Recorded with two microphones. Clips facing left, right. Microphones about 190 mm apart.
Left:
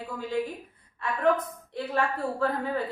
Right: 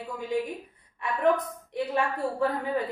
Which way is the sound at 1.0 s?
15° right (ahead or behind).